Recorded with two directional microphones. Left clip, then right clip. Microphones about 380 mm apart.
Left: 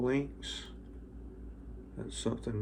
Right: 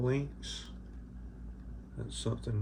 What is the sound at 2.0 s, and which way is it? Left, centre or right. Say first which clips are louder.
Speech: left 3 dB; centre.